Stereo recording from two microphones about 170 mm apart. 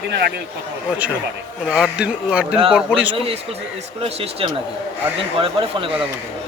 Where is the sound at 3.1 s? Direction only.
35° right (ahead or behind).